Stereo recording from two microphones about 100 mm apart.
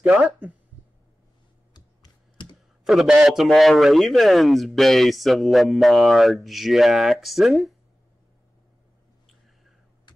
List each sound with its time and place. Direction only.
0.0 s speech: 15° right (ahead or behind)
1.7 s computer keyboard: 45° left (ahead or behind)
2.8 s a man's voice: centre (ahead or behind)